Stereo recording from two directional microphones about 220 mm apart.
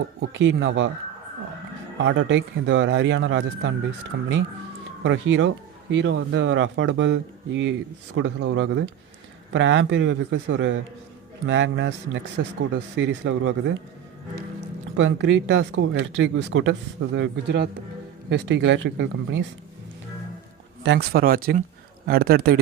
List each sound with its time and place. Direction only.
0.2 s speech: 55° right (ahead or behind)
2.0 s speech: 55° right (ahead or behind)
14.9 s speech: 55° right (ahead or behind)
20.8 s speech: 50° right (ahead or behind)